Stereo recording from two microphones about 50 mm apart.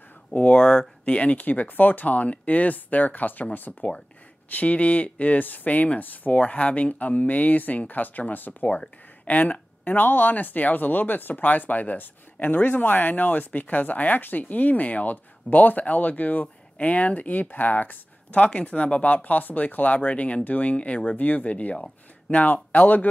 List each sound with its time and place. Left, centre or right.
0.3 s speech: left
3.7 s speech: centre
4.5 s speech: left